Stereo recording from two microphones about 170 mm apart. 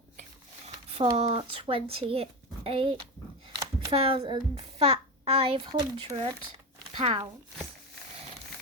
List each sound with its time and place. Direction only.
0.9 s speech: 35° right (ahead or behind)
5.7 s speech: 20° right (ahead or behind)